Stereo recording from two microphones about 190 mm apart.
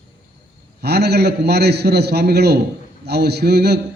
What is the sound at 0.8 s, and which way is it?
A man's voice, 60° right (ahead or behind).